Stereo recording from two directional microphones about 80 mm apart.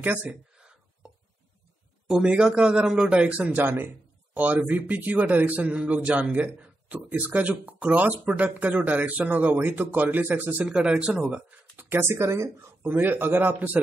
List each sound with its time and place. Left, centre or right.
0.0 s speech: centre
2.0 s a man's voice: centre
10.6 s a man's voice: centre